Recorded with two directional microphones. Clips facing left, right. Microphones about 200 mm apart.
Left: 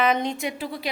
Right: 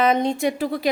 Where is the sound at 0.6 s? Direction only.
50° right (ahead or behind).